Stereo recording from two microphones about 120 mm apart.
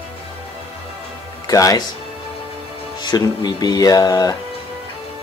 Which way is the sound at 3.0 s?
35° left (ahead or behind).